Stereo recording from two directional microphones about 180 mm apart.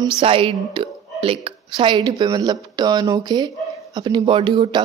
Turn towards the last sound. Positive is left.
turn(degrees=-25)  # may be behind; listen again after turning